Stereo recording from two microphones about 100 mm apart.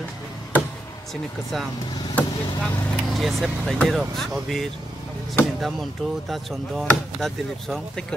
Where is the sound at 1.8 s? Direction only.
45° left (ahead or behind).